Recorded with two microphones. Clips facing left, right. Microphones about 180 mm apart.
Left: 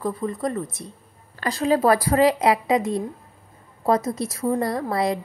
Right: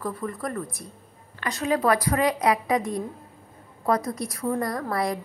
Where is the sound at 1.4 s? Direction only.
35° left (ahead or behind).